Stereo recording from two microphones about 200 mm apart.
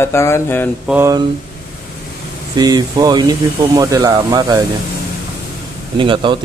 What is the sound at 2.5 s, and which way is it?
Speech, 20° right (ahead or behind).